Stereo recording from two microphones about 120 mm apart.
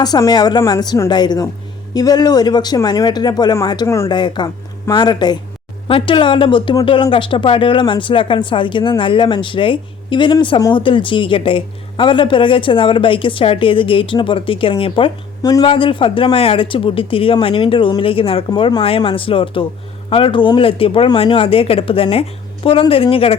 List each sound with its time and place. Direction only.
0.0 s speech: 35° left (ahead or behind)
4.1 s a woman's voice: 40° left (ahead or behind)